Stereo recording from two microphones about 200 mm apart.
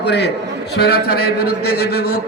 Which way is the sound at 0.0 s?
55° left (ahead or behind).